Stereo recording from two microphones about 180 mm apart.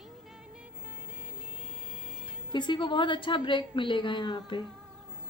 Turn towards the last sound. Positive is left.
turn(degrees=25)  # may be behind; listen again after turning